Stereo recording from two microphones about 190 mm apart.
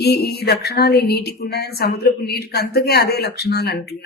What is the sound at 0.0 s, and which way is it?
Speech, 55° left (ahead or behind).